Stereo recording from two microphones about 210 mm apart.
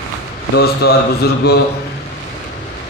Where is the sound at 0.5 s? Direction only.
50° left (ahead or behind).